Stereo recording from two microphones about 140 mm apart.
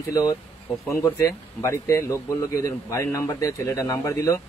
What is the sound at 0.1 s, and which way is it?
Speech, 25° left (ahead or behind).